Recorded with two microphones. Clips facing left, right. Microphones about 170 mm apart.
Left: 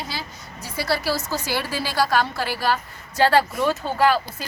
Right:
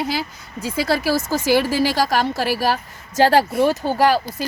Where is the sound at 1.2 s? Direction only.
50° right (ahead or behind).